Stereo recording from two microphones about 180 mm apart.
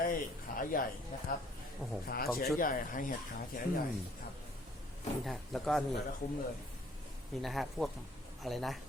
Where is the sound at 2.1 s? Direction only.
55° left (ahead or behind).